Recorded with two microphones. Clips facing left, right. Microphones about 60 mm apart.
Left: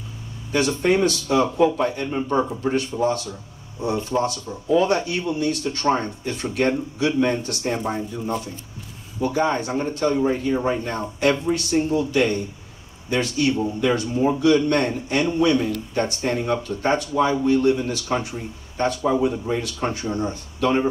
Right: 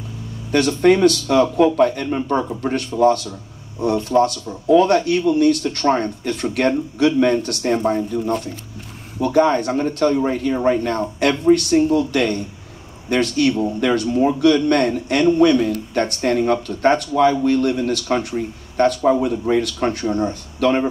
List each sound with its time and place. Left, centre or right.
0.5 s a man's voice: right